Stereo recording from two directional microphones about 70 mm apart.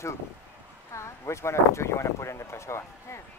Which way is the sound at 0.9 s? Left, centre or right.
Left.